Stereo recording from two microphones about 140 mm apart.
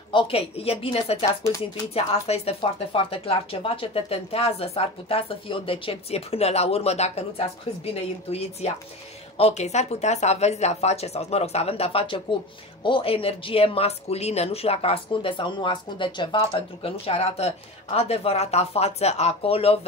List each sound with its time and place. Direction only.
0.1 s speech: 40° left (ahead or behind)